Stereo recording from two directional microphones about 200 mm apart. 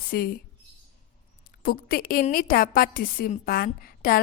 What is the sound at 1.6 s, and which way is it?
A woman's voice, 45° left (ahead or behind).